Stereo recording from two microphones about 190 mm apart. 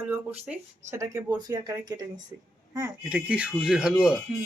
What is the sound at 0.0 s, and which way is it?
Speech, 10° right (ahead or behind).